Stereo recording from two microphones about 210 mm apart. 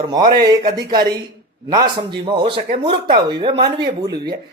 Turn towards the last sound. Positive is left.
turn(degrees=-20)  # may be behind; listen again after turning